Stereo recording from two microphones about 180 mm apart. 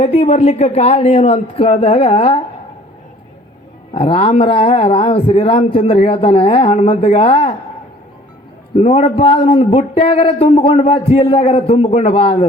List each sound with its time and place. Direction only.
0.0 s speech: 35° left (ahead or behind)
3.9 s speech: 30° left (ahead or behind)
8.7 s speech: 35° left (ahead or behind)